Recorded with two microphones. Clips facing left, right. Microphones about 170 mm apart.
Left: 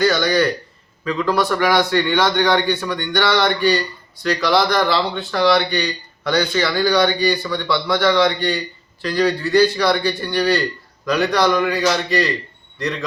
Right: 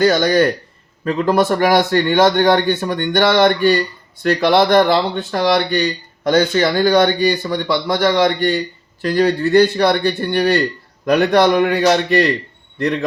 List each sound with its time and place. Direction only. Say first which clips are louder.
0.0 s a man's voice: right 3 dB; 45° right (ahead or behind)